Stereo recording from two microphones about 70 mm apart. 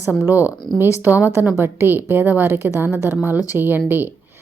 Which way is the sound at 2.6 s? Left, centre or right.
Right.